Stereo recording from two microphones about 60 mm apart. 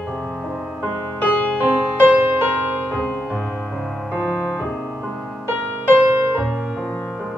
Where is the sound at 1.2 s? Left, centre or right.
Left.